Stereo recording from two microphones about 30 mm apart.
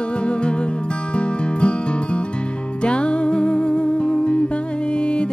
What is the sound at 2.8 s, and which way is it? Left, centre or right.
Music, left.